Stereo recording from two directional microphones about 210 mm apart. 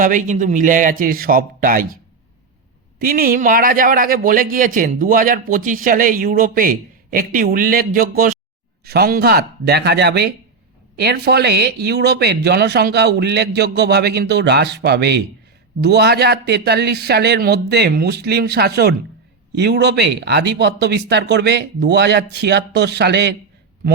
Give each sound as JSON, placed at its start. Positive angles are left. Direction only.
{"t": 0.0, "sound": "a man's voice", "side_deg": -40}
{"t": 3.0, "sound": "a man's voice", "side_deg": -45}